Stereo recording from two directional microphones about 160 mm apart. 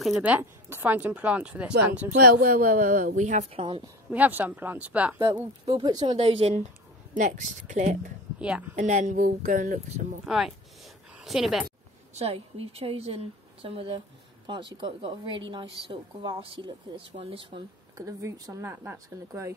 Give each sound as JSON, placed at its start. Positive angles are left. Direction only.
{"t": 0.0, "sound": "speech", "side_deg": -5}
{"t": 2.1, "sound": "a woman's voice", "side_deg": -65}
{"t": 3.5, "sound": "a woman's voice", "side_deg": -35}
{"t": 4.1, "sound": "speech", "side_deg": -10}
{"t": 5.2, "sound": "speech", "side_deg": -25}
{"t": 7.2, "sound": "speech", "side_deg": -50}
{"t": 8.4, "sound": "speech", "side_deg": -5}
{"t": 8.7, "sound": "speech", "side_deg": -50}
{"t": 10.2, "sound": "a woman's voice", "side_deg": -5}
{"t": 12.1, "sound": "a woman's voice", "side_deg": -40}
{"t": 17.9, "sound": "speech", "side_deg": -20}